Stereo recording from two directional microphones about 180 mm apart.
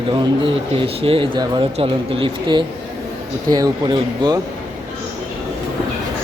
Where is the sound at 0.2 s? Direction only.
30° right (ahead or behind).